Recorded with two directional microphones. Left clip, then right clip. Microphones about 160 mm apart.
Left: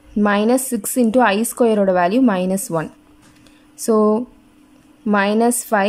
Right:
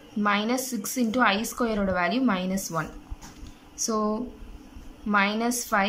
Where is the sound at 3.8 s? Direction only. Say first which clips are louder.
Left 12 dB; 40° left (ahead or behind).